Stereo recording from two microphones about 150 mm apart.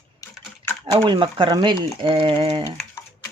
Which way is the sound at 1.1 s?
35° right (ahead or behind).